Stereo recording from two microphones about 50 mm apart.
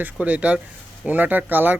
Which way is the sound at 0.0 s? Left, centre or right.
Right.